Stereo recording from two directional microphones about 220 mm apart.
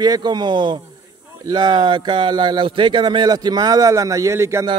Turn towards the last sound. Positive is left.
turn(degrees=-10)  # may be behind; listen again after turning